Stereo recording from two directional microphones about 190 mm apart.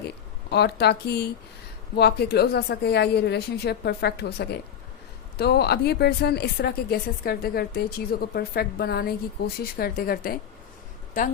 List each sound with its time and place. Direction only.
0.5 s a woman's voice: 60° left (ahead or behind)